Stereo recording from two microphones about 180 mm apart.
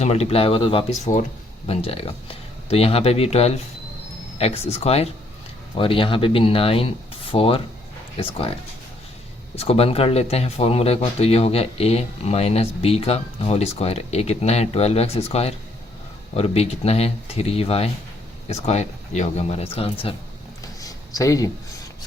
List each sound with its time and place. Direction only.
0.0 s speech: 35° left (ahead or behind)
9.6 s speech: 35° left (ahead or behind)
20.8 s a sound: 20° left (ahead or behind)